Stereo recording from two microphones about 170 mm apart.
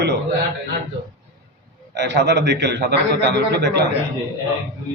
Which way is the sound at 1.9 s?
85° right.